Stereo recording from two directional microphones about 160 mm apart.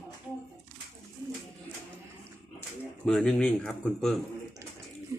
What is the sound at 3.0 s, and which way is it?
A man's voice, 5° left (ahead or behind).